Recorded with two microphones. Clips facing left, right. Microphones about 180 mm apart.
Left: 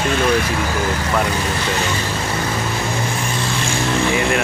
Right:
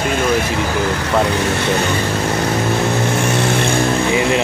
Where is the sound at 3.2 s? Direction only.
70° right (ahead or behind).